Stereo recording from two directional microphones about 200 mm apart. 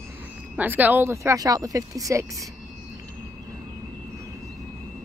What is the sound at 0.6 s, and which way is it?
Speech, 10° right (ahead or behind).